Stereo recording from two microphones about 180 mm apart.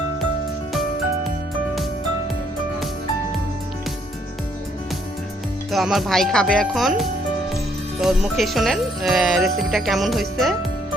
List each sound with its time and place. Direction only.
5.7 s speech: centre (ahead or behind)